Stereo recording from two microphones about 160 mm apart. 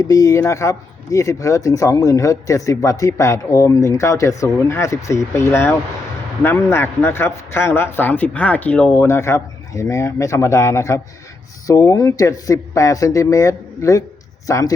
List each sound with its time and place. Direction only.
0.0 s a man's voice: 20° left (ahead or behind)